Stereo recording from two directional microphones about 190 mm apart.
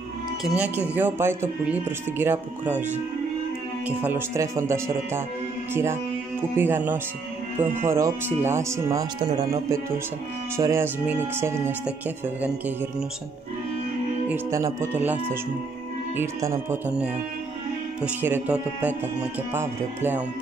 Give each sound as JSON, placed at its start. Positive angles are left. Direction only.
{"t": 0.4, "sound": "speech", "side_deg": -5}
{"t": 14.3, "sound": "speech", "side_deg": -15}
{"t": 16.2, "sound": "speech", "side_deg": -15}